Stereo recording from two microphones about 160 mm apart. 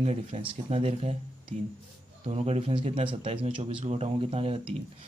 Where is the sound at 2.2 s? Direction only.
40° right (ahead or behind).